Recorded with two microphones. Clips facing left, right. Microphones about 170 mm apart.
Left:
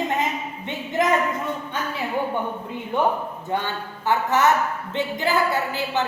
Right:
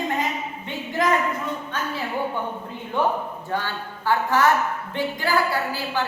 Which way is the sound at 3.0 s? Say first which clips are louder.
Even; 15° left (ahead or behind).